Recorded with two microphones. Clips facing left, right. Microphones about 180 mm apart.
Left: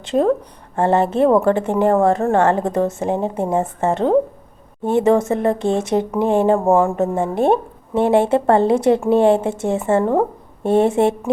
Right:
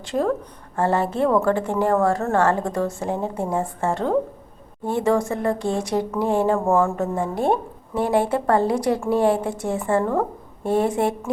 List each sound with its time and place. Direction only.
0.0 s speech: 20° left (ahead or behind)